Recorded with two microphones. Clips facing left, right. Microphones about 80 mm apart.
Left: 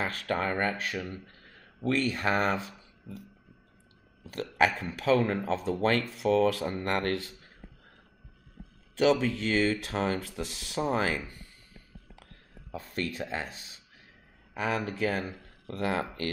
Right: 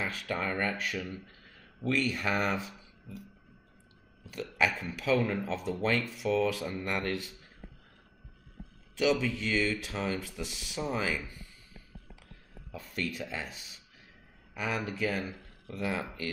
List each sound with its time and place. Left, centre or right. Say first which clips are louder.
0.0 s speech: left 4 dB; left
1.1 s a sound: left 1 dB; left
1.9 s speech: left 3 dB; left
4.3 s speech: left 4 dB; left
8.9 s speech: left 4 dB; left
12.7 s speech: left 2 dB; left
14.5 s speech: left 3 dB; left
15.6 s speech: left 4 dB; left